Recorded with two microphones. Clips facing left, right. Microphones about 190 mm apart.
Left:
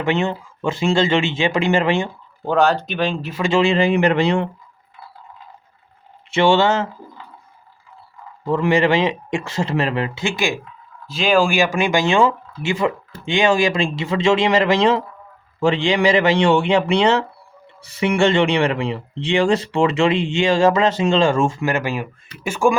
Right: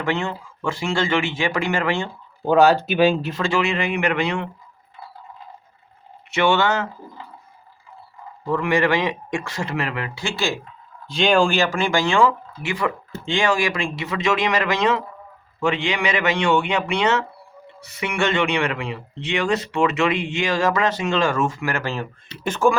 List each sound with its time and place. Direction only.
0.0 s speech: 20° left (ahead or behind)
2.4 s speech: centre (ahead or behind)
3.4 s a man's voice: 25° left (ahead or behind)
6.3 s speech: 25° left (ahead or behind)
8.4 s speech: 25° left (ahead or behind)
11.1 s a man's voice: 5° left (ahead or behind)